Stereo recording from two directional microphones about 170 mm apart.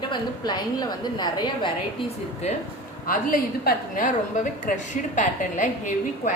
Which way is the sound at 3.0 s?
55° left (ahead or behind).